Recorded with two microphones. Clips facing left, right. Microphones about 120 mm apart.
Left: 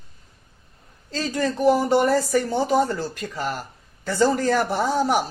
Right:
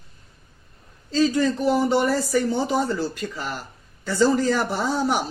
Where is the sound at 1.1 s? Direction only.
50° left (ahead or behind).